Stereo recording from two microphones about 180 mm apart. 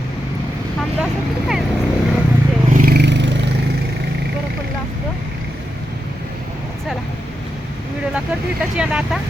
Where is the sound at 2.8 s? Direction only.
65° right (ahead or behind).